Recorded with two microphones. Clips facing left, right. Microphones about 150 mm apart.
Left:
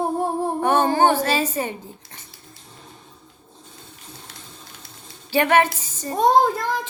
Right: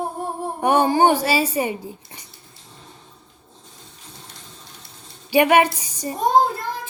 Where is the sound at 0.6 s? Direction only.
15° right (ahead or behind).